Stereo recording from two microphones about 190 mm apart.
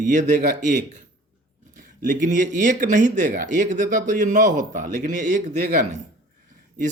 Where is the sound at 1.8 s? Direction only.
40° right (ahead or behind).